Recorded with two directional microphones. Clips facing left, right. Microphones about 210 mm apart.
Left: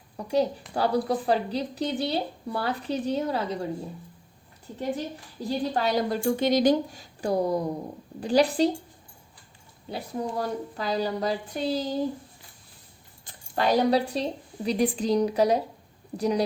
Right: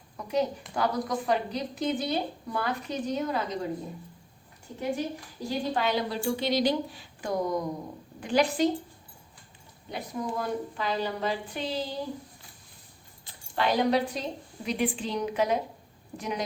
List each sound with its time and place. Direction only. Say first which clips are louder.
0.2 s a woman's voice: left 3 dB; 35° left (ahead or behind)
5.5 s a woman's voice: left 2 dB; 40° left (ahead or behind)
9.9 s a woman's voice: left 2 dB; 35° left (ahead or behind)
13.2 s a woman's voice: left 3 dB; 40° left (ahead or behind)